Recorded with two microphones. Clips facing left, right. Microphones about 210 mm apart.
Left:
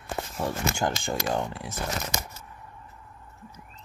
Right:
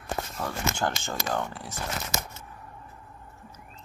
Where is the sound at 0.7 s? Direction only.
15° left (ahead or behind).